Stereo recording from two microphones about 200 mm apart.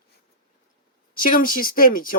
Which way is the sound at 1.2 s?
45° left (ahead or behind).